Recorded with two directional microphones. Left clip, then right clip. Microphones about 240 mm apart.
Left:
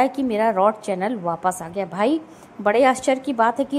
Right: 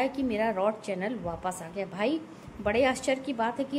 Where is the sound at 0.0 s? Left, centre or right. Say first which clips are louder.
Left 9 dB; centre.